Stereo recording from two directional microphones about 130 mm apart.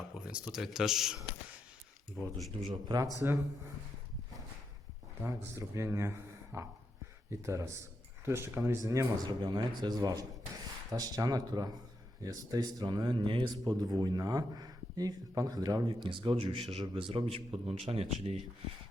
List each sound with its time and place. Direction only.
0.3 s speech: 5° right (ahead or behind)
2.3 s speech: centre (ahead or behind)
3.2 s a man's voice: 15° right (ahead or behind)
5.5 s a man's voice: 20° right (ahead or behind); by 18.3 s 55° right (ahead or behind)